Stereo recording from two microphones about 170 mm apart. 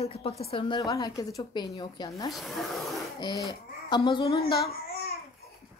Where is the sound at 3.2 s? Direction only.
25° left (ahead or behind).